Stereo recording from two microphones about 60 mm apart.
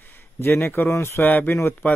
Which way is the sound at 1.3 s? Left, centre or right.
Left.